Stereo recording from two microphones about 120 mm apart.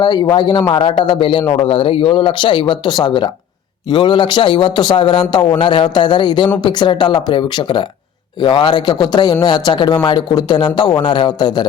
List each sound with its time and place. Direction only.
0.0 s a man's voice: 35° left (ahead or behind)